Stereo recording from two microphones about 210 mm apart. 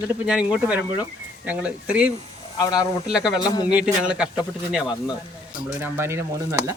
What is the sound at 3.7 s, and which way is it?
Speech, 5° right (ahead or behind).